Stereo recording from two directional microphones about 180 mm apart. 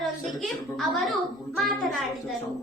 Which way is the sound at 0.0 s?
Centre (ahead or behind).